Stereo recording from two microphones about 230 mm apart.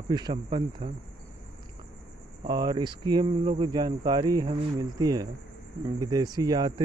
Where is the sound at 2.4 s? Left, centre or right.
Centre.